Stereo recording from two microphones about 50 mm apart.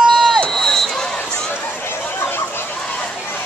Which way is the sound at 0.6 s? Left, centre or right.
Centre.